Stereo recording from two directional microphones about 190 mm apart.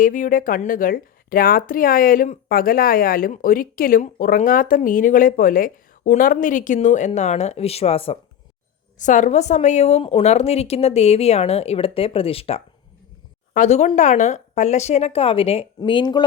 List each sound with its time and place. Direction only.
0.0 s a woman's voice: 45° left (ahead or behind); by 16.2 s 25° left (ahead or behind)